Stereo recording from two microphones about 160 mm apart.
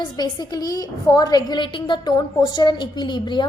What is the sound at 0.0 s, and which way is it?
A woman's voice, 25° left (ahead or behind).